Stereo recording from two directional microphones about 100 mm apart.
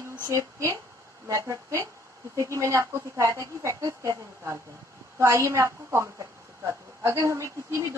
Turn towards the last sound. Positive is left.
turn(degrees=-30)  # may be behind; listen again after turning